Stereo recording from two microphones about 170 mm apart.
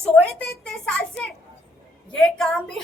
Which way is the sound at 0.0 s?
5° left (ahead or behind).